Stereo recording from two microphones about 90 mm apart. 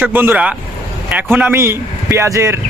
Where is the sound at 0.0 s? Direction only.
20° right (ahead or behind).